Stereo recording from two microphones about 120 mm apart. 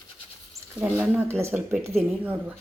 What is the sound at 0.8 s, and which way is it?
Speech, 15° right (ahead or behind).